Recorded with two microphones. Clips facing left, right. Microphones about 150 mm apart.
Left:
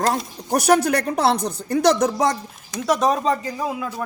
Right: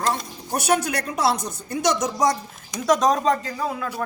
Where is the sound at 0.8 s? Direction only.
60° left (ahead or behind).